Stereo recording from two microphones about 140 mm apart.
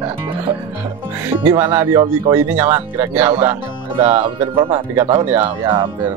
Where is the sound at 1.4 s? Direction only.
20° right (ahead or behind).